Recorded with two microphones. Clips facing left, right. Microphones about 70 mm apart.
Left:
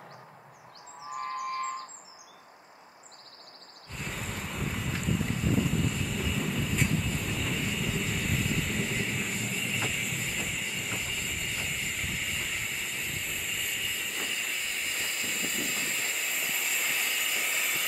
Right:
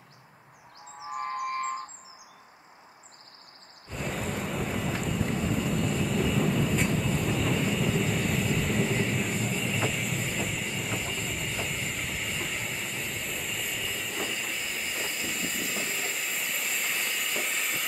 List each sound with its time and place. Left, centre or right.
1.1 s squawk: right
3.9 s vehicle: centre